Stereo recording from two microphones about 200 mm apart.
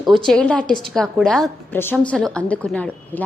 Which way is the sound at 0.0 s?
Centre (ahead or behind).